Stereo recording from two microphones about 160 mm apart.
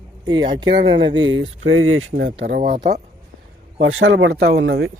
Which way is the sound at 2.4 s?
65° right (ahead or behind).